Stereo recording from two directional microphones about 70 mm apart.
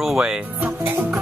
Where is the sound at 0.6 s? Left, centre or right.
Right.